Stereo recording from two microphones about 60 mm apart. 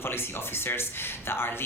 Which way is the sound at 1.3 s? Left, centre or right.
Left.